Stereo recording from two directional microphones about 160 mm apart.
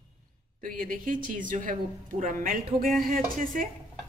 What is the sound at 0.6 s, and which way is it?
A woman's voice, 55° right (ahead or behind).